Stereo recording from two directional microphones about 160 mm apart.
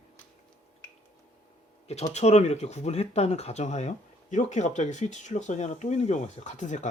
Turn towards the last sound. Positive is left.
turn(degrees=50)  # may be behind; listen again after turning